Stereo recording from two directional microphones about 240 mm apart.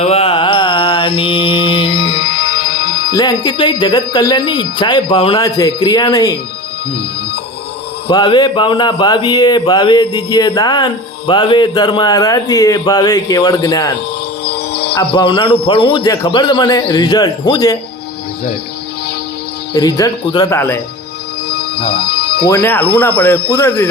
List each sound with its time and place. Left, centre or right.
0.0 s music: left
3.1 s speech: centre
8.0 s speech: centre
14.4 s music: left
15.1 s a man's voice: left
19.7 s speech: centre
21.8 s speech: left
22.0 s music: left
22.4 s speech: centre